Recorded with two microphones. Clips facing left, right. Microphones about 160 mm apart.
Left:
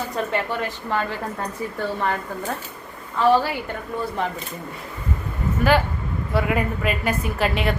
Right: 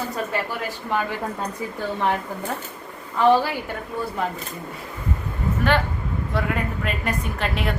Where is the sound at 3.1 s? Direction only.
15° right (ahead or behind).